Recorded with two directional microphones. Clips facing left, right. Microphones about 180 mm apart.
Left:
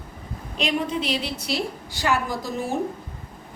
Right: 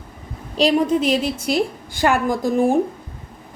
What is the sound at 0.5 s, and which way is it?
A woman's voice, 40° right (ahead or behind).